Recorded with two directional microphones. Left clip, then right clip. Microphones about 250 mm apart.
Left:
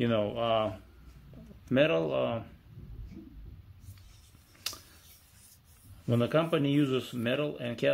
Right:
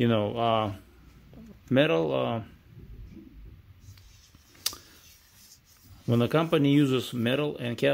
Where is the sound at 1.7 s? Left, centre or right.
Right.